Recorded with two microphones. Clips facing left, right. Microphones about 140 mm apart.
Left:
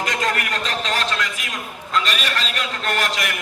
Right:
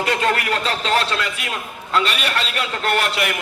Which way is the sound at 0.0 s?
30° right (ahead or behind).